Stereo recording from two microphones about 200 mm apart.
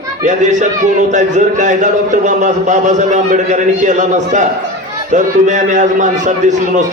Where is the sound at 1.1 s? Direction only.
40° right (ahead or behind).